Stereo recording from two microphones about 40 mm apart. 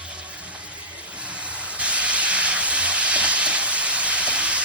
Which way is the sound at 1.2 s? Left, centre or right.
Right.